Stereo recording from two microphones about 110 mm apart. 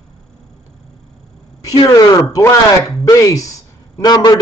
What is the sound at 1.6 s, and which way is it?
A man's voice, 35° left (ahead or behind).